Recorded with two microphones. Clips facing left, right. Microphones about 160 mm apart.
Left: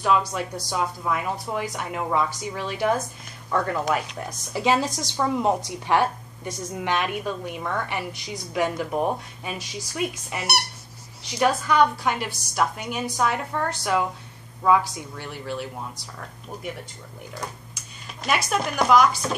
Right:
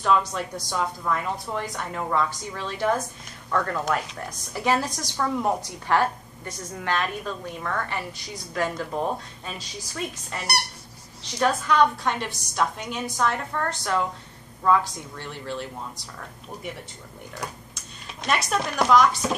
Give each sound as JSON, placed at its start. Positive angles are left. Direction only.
{"t": 0.3, "sound": "a woman's voice", "side_deg": 5}
{"t": 4.6, "sound": "a woman's voice", "side_deg": 20}
{"t": 18.0, "sound": "music", "side_deg": 5}
{"t": 18.5, "sound": "speech", "side_deg": 5}